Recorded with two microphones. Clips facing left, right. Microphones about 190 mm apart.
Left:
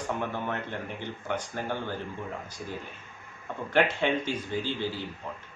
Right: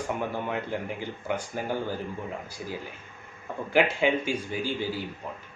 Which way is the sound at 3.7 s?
10° right (ahead or behind).